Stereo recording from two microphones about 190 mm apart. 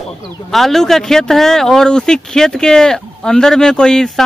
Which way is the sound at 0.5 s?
Centre (ahead or behind).